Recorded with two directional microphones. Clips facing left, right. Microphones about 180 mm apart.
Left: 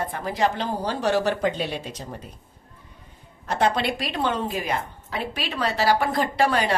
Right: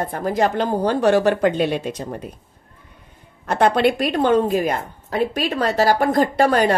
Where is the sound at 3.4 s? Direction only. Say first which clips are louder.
Right 6 dB; 55° right (ahead or behind).